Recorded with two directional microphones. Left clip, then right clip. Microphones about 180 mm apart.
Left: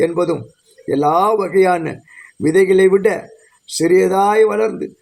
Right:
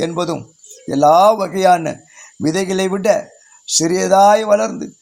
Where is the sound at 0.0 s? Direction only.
25° right (ahead or behind).